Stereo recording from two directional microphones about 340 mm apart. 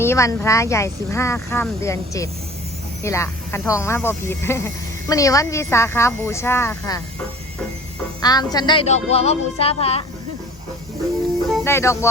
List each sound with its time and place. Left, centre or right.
0.0 s speech: centre
8.2 s speech: centre
11.5 s speech: centre